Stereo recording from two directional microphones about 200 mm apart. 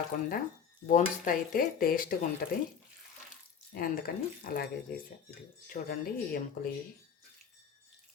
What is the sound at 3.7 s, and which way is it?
Speech, 45° left (ahead or behind).